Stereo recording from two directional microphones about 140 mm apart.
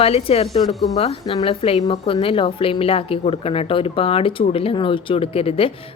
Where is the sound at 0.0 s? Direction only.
45° left (ahead or behind).